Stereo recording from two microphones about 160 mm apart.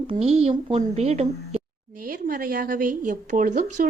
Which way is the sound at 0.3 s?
35° right (ahead or behind).